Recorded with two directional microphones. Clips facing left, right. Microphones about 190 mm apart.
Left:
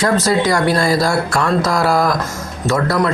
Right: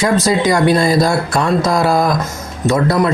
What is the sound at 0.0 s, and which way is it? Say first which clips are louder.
Speech: right 1 dB; 15° right (ahead or behind).